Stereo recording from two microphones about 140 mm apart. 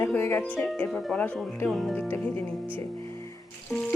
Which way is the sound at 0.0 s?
15° left (ahead or behind).